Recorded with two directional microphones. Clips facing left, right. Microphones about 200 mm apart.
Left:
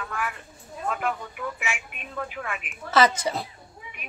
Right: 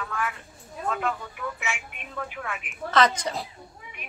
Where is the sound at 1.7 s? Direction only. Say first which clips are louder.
Even; centre (ahead or behind).